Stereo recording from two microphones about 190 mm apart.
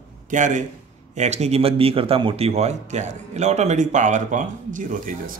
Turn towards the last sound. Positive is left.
turn(degrees=-45)  # may be behind; listen again after turning